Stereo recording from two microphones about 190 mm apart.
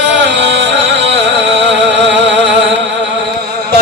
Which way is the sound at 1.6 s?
70° right (ahead or behind).